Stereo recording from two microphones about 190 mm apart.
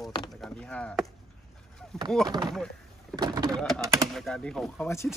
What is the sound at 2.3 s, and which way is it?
Speech, 20° right (ahead or behind).